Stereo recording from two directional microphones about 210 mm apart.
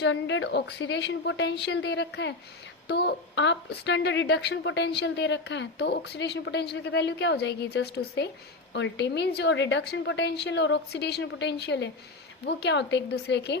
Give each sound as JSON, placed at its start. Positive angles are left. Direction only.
{"t": 0.0, "sound": "a woman's voice", "side_deg": 60}